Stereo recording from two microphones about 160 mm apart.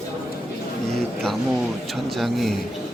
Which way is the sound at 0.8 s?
5° left (ahead or behind).